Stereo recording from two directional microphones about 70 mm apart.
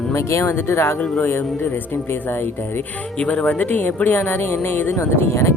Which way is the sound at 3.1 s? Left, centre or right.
Centre.